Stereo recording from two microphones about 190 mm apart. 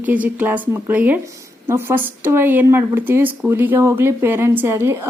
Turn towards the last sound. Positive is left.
turn(degrees=-15)  # may be behind; listen again after turning